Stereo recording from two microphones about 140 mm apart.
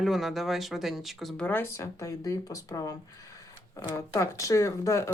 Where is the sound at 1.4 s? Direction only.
15° left (ahead or behind).